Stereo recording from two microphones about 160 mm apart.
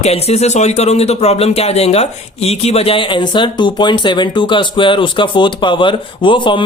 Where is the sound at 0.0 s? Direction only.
40° left (ahead or behind).